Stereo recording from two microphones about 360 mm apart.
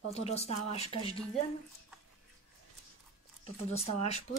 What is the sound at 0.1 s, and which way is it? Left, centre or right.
Speech, centre.